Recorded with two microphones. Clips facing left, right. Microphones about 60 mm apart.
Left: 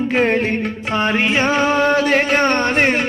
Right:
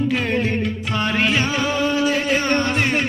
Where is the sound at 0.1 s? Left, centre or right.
Left.